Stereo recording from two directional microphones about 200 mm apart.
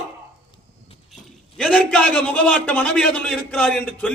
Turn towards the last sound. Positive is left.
turn(degrees=5)  # may be behind; listen again after turning